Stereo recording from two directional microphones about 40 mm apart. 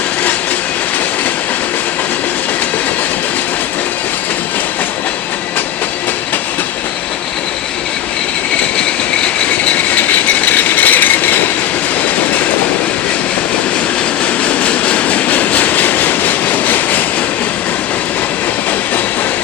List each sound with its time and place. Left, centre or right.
9.9 s vehicle: left
14.3 s vehicle: left